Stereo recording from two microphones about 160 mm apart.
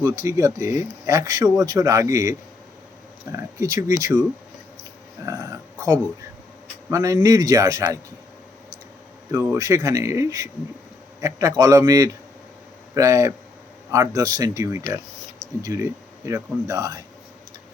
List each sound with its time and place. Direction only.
0.0 s speech: 20° right (ahead or behind)
3.3 s speech: 20° right (ahead or behind)
4.8 s a sound: 20° right (ahead or behind)
6.9 s speech: 20° right (ahead or behind)
9.3 s a man's voice: 15° right (ahead or behind)